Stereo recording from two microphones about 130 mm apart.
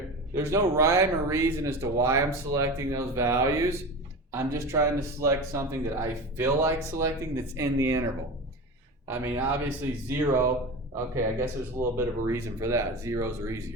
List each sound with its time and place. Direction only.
0.3 s speech: 20° right (ahead or behind)
9.2 s speech: 20° right (ahead or behind)